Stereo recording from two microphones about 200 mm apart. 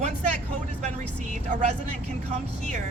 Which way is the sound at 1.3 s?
40° right (ahead or behind).